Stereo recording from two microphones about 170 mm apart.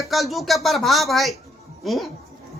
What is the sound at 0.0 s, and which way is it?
A woman's voice, centre (ahead or behind).